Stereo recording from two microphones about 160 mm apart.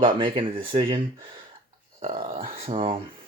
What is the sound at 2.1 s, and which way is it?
Speech, 35° right (ahead or behind).